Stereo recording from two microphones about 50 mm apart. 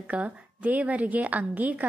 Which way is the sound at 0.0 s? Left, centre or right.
Right.